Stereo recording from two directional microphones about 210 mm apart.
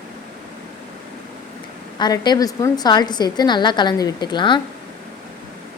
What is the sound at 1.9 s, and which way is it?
A woman's voice, 20° left (ahead or behind).